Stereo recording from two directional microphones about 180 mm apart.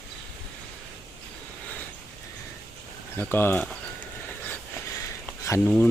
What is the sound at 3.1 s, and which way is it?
Speech, 10° left (ahead or behind).